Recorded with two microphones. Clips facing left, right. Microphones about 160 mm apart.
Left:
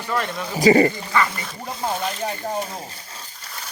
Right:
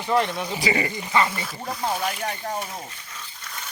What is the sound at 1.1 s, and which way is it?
Speech, 25° right (ahead or behind).